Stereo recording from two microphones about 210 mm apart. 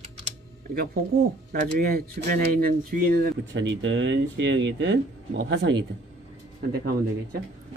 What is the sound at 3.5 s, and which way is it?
Speech, 60° right (ahead or behind).